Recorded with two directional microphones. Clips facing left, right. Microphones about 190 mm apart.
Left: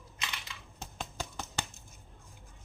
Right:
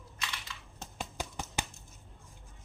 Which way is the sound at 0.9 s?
10° right (ahead or behind).